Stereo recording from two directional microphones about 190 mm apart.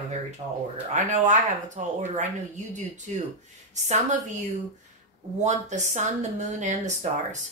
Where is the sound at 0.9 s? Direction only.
40° right (ahead or behind).